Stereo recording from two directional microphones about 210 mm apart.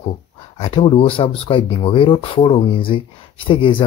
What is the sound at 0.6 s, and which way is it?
Speech, 25° left (ahead or behind).